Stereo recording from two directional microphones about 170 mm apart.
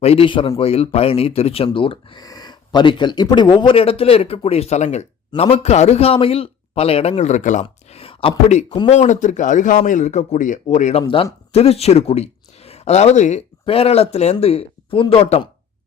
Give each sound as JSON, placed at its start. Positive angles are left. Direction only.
{"t": 0.0, "sound": "speech", "side_deg": 35}